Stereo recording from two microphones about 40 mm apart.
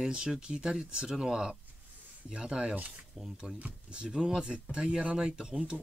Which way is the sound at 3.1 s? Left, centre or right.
Centre.